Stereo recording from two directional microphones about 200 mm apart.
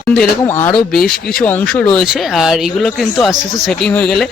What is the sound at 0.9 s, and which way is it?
Speech, 45° left (ahead or behind).